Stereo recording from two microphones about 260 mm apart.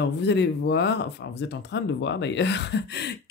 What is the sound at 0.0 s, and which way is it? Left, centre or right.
Speech, left.